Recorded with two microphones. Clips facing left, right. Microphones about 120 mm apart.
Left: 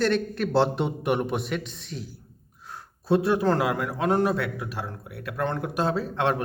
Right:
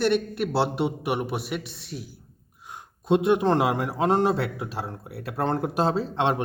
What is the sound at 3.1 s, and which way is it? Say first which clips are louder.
A man's voice: right 1 dB; 20° right (ahead or behind).